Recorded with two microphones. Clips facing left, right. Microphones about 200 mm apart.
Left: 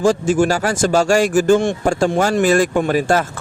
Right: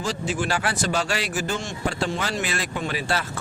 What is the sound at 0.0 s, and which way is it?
Speech, 50° left (ahead or behind).